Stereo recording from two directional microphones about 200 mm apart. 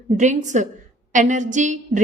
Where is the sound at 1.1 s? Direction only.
40° right (ahead or behind).